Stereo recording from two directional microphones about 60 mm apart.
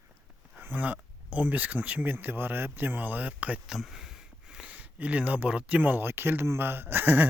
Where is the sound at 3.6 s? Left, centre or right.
Centre.